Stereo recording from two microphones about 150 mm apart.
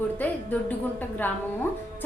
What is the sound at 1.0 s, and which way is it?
Speech, 10° left (ahead or behind).